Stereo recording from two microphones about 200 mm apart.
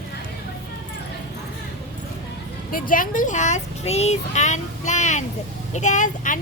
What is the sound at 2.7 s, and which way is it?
Speech, 45° left (ahead or behind).